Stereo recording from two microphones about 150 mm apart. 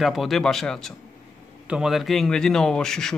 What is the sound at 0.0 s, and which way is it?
Speech, centre (ahead or behind).